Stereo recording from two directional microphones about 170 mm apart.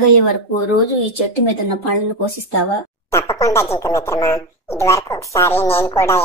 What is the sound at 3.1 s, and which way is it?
Speech, 15° left (ahead or behind).